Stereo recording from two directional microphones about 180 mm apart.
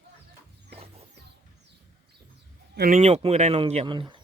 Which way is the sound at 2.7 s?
55° right (ahead or behind).